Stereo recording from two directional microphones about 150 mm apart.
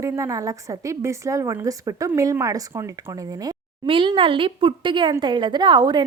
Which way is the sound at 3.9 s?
35° right (ahead or behind).